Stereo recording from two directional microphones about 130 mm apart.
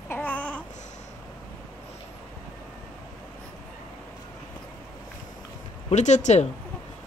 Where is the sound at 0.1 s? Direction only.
10° left (ahead or behind).